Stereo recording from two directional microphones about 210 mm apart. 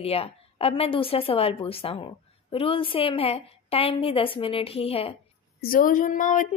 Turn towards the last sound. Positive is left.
turn(degrees=40)  # may be behind; listen again after turning